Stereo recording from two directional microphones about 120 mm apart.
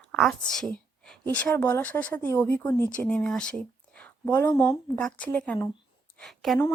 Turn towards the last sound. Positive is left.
turn(degrees=0)  # may be behind; listen again after turning